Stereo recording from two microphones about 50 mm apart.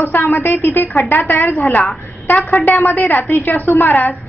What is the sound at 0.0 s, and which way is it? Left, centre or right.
A woman's voice, left.